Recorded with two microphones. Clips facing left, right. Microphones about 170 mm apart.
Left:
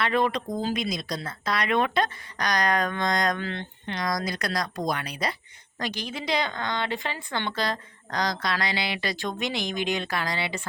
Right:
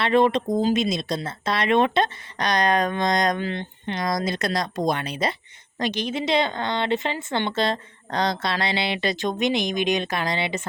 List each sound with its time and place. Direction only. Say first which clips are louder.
0.0 s speech: right 6 dB; 25° right (ahead or behind)